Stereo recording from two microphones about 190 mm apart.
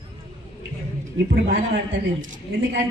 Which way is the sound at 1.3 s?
50° right (ahead or behind).